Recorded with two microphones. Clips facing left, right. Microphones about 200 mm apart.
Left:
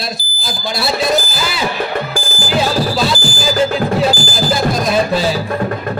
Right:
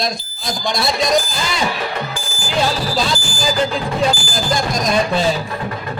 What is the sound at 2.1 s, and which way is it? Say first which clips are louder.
Music: left 7 dB; 35° left (ahead or behind).